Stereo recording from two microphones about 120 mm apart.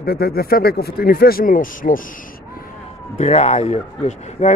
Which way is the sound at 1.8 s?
90° left.